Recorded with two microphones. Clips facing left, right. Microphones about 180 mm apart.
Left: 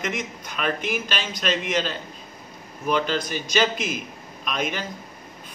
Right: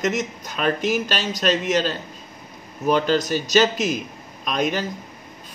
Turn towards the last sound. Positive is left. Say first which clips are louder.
# right 5 dB
turn(degrees=-40)  # may be behind; listen again after turning